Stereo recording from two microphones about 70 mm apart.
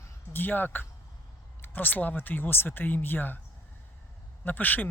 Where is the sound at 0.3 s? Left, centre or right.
Left.